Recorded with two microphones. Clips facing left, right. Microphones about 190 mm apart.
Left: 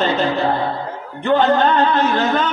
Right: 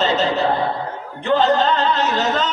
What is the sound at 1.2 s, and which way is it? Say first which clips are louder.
Speech: left 2 dB; 55° left (ahead or behind).